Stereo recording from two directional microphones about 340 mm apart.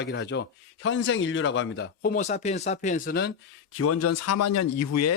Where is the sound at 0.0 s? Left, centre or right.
Left.